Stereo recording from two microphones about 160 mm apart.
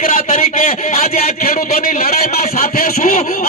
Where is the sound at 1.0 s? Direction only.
65° left (ahead or behind).